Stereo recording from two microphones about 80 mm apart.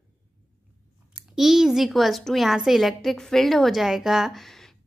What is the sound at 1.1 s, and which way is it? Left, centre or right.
A woman's voice, centre.